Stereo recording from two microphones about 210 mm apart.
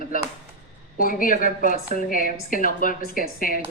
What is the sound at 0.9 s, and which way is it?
Speech, 40° left (ahead or behind).